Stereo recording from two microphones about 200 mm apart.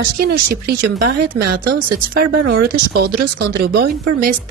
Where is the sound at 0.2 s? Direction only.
50° right (ahead or behind).